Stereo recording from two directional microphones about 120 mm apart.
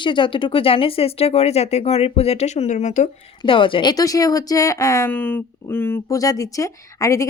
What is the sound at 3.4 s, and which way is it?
Speech, 45° left (ahead or behind).